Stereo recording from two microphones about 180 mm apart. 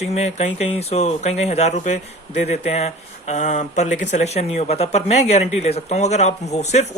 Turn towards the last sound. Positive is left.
turn(degrees=40)  # may be behind; listen again after turning